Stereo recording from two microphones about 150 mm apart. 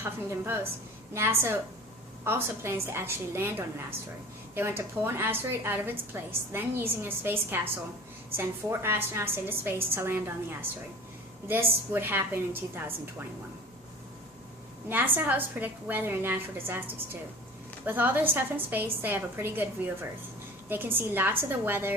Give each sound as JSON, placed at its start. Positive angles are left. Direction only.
{"t": 0.0, "sound": "a woman's voice", "side_deg": -15}
{"t": 4.5, "sound": "a woman's voice", "side_deg": -15}
{"t": 14.8, "sound": "a woman's voice", "side_deg": -15}
{"t": 17.8, "sound": "a woman's voice", "side_deg": -15}